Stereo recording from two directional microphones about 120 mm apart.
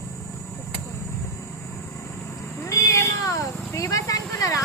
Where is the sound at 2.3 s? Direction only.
25° left (ahead or behind).